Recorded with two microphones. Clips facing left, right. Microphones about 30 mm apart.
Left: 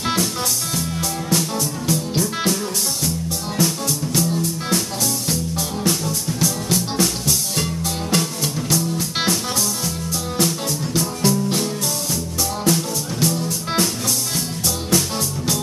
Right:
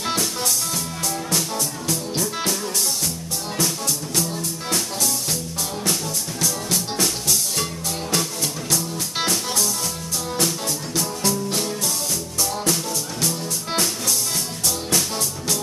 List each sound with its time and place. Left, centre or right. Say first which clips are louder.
0.0 s music: left 3 dB; centre
1.9 s music: left 5 dB; centre
3.5 s music: left 3 dB; centre
5.9 s music: left 4 dB; centre
14.9 s music: left 5 dB; centre